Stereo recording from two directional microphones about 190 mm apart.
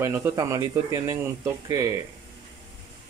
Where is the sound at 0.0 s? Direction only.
15° right (ahead or behind).